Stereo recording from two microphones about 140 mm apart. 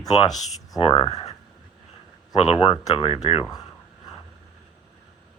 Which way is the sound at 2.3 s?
45° left (ahead or behind).